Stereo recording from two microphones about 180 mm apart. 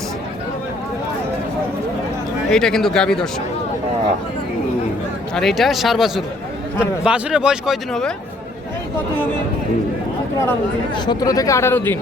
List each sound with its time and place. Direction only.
2.5 s a man's voice: 5° left (ahead or behind)
5.3 s a man's voice: centre (ahead or behind)
10.9 s speech: 25° left (ahead or behind)